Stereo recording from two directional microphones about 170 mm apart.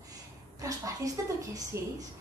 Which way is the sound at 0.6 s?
20° right (ahead or behind).